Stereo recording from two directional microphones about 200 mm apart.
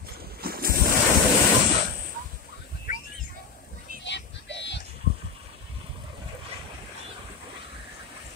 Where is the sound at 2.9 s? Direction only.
40° left (ahead or behind).